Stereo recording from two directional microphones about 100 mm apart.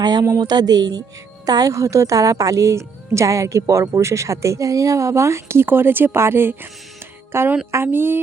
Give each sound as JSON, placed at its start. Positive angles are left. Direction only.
{"t": 0.0, "sound": "a woman's voice", "side_deg": -45}